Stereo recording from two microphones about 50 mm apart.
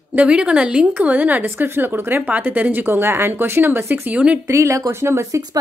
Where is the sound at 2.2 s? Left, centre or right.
Right.